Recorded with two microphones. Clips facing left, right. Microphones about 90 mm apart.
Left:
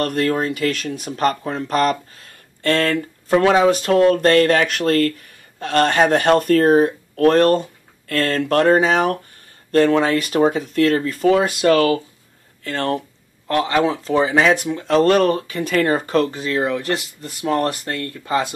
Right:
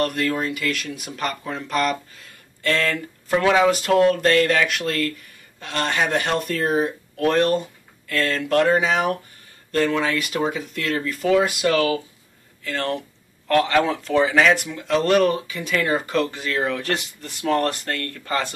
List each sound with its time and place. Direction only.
0.0 s speech: 40° left (ahead or behind)
13.5 s speech: 20° left (ahead or behind)
16.5 s speech: 10° left (ahead or behind)